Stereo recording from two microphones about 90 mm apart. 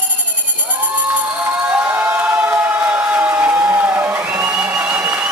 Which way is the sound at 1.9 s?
20° right (ahead or behind).